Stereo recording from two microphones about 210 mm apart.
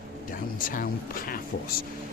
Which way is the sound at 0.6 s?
40° left (ahead or behind).